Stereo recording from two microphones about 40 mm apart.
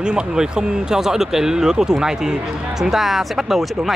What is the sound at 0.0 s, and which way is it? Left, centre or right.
Speech, right.